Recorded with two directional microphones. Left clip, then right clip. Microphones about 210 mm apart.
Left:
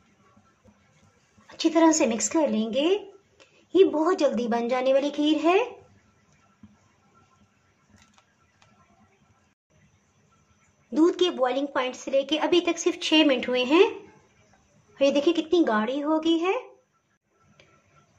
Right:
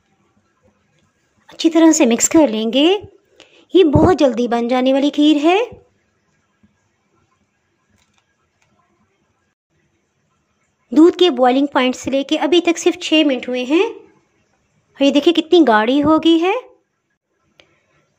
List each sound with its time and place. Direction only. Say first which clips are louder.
1.5 s speech: right 8 dB; 40° right (ahead or behind)
10.9 s speech: right 11 dB; 35° right (ahead or behind)
15.0 s speech: right 8 dB; 35° right (ahead or behind)
17.6 s tick-tock: right 7 dB; 35° right (ahead or behind)